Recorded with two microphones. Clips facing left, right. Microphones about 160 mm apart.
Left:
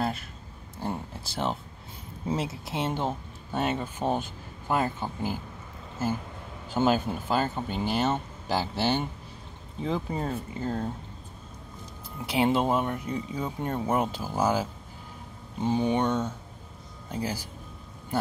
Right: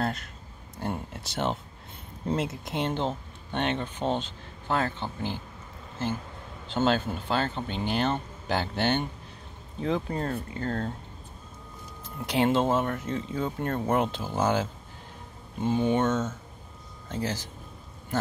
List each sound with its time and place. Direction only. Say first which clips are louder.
0.0 s a sound: even; 5° left (ahead or behind)
0.7 s speech: even; centre (ahead or behind)
6.7 s speech: left 1 dB; 10° left (ahead or behind)
12.3 s speech: even; 10° left (ahead or behind)